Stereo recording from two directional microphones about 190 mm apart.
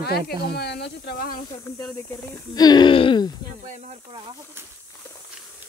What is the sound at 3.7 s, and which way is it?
Speech, 40° right (ahead or behind).